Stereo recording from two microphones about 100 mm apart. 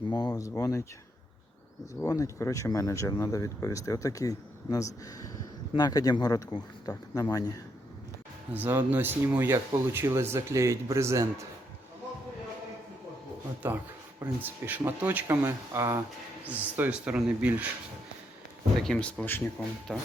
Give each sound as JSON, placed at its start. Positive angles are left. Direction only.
{"t": 0.1, "sound": "speech", "side_deg": 40}
{"t": 2.0, "sound": "speech", "side_deg": 30}
{"t": 8.5, "sound": "speech", "side_deg": -20}
{"t": 13.6, "sound": "speech", "side_deg": -20}
{"t": 16.5, "sound": "speech", "side_deg": -15}
{"t": 18.8, "sound": "speech", "side_deg": 5}